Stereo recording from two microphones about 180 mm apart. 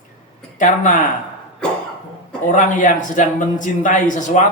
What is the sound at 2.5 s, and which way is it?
A man's voice, 45° left (ahead or behind).